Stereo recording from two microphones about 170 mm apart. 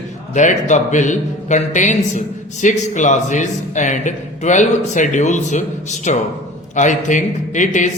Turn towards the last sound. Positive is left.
turn(degrees=45)  # may be behind; listen again after turning